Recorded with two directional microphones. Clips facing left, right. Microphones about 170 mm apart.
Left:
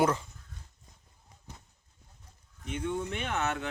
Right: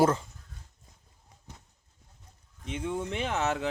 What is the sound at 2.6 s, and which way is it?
Speech, 25° right (ahead or behind).